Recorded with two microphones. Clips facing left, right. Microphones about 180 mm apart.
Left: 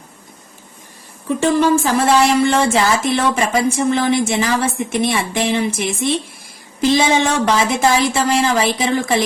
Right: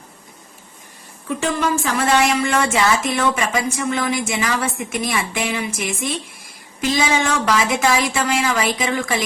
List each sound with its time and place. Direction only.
1.4 s speech: 30° left (ahead or behind)